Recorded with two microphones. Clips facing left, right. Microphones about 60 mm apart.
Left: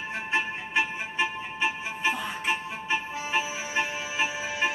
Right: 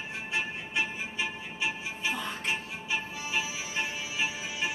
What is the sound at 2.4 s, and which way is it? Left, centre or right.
Music, left.